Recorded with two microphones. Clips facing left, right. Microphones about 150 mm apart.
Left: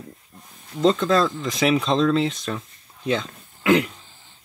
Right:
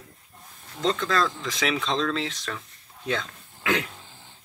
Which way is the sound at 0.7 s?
25° left (ahead or behind).